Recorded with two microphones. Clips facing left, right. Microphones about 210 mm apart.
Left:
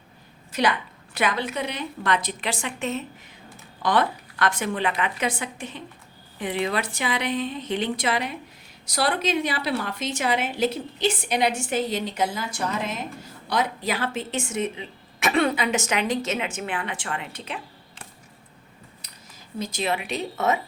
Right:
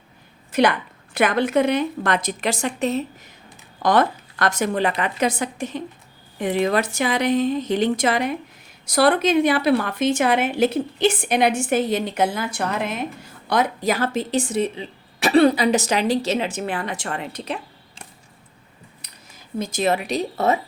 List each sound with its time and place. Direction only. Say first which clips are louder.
1.1 s a woman's voice: right 8 dB; 50° right (ahead or behind)
13.5 s speech: right 5 dB; 50° right (ahead or behind)
19.0 s a sound: right 1 dB; 60° right (ahead or behind)
19.5 s speech: right 6 dB; 45° right (ahead or behind)